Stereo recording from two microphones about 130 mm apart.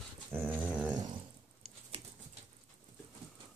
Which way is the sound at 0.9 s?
30° right (ahead or behind).